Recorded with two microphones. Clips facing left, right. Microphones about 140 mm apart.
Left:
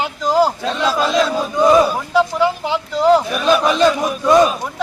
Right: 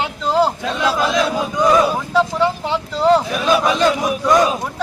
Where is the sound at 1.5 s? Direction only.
20° left (ahead or behind).